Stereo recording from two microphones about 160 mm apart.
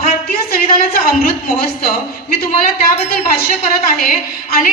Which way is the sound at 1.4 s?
70° left (ahead or behind).